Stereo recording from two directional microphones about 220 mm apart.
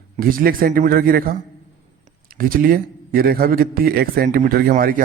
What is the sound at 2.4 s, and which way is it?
A man's voice, 40° right (ahead or behind).